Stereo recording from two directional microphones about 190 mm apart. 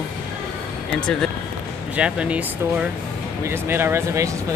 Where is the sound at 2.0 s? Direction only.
5° right (ahead or behind).